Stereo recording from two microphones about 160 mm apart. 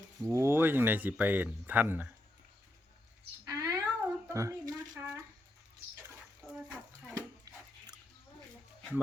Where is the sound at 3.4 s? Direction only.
20° right (ahead or behind).